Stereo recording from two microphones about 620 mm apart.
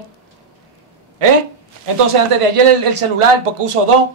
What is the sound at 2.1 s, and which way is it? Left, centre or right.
A man's voice, right.